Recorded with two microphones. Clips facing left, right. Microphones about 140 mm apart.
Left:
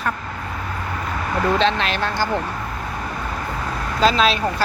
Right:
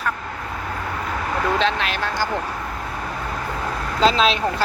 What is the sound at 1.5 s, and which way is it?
Speech, 10° right (ahead or behind).